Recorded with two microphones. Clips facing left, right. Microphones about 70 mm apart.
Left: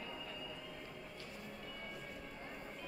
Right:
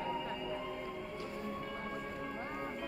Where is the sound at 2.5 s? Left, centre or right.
Right.